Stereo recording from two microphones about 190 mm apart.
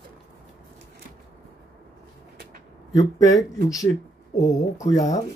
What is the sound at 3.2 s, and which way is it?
Speech, 20° left (ahead or behind).